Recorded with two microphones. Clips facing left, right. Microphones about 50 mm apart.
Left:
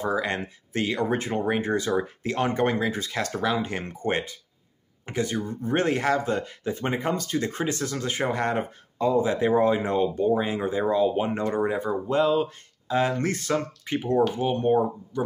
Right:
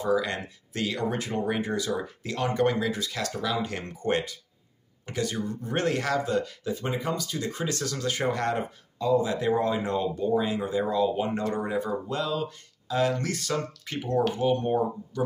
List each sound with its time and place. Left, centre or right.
0.0 s speech: left
7.7 s speech: left
8.9 s speech: left